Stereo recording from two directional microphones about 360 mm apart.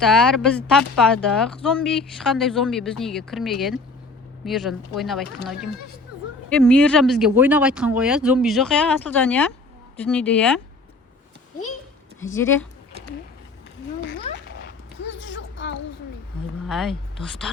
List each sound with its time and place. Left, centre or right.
0.0 s speech: centre
12.2 s speech: centre
15.0 s a sound: left
16.6 s speech: centre